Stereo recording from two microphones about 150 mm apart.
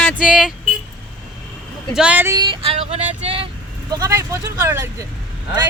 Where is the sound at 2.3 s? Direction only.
30° right (ahead or behind).